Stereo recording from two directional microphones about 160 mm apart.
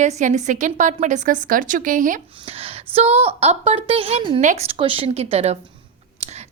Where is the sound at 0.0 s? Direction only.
50° right (ahead or behind).